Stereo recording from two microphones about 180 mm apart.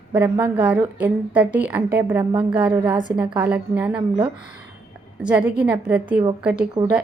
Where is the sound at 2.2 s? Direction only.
20° right (ahead or behind).